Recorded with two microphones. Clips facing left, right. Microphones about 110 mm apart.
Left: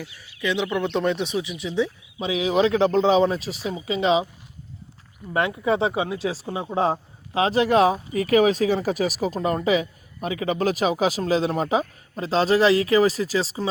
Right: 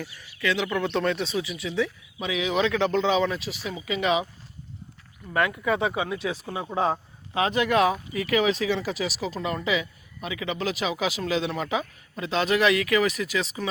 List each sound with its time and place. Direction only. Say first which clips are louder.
0.3 s speech: left 2 dB; 20° left (ahead or behind)
5.3 s speech: left 2 dB; 25° left (ahead or behind)